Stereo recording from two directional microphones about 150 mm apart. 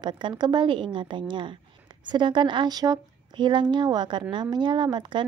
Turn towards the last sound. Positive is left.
turn(degrees=-30)  # may be behind; listen again after turning